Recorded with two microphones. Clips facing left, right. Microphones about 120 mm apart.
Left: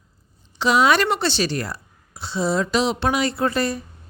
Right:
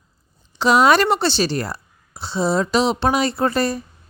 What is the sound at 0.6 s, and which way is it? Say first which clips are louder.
A woman's voice: right 3 dB; 40° right (ahead or behind).